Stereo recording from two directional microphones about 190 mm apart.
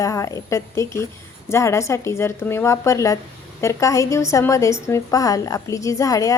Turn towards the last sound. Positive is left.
turn(degrees=15)  # may be behind; listen again after turning